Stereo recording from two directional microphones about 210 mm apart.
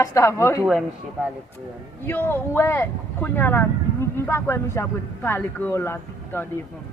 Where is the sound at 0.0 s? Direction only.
15° left (ahead or behind).